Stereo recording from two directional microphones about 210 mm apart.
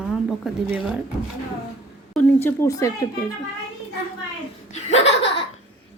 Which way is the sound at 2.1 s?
10° left (ahead or behind).